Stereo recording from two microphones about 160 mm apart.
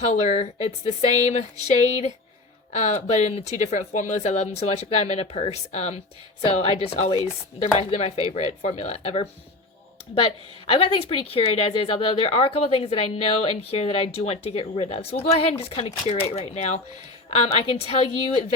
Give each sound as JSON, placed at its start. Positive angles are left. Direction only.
{"t": 0.0, "sound": "speech", "side_deg": 45}
{"t": 10.7, "sound": "speech", "side_deg": 35}